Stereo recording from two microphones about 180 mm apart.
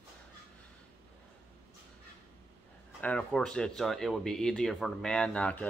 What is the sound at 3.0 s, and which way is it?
Speech, 5° left (ahead or behind).